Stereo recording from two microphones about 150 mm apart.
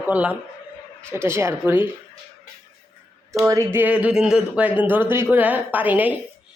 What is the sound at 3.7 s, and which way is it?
A woman's voice, 10° right (ahead or behind).